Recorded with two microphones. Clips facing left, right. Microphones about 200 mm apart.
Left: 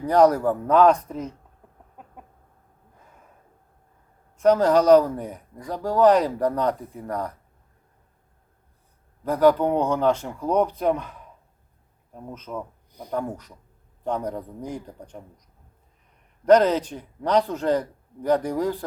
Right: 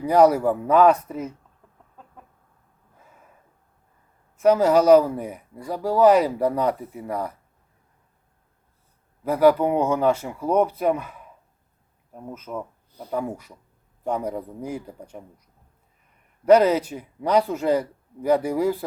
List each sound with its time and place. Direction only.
0.0 s speech: 10° right (ahead or behind)
2.0 s chicken: 15° left (ahead or behind)
4.4 s speech: 10° right (ahead or behind)
9.2 s speech: 10° right (ahead or behind)
16.5 s speech: 10° right (ahead or behind)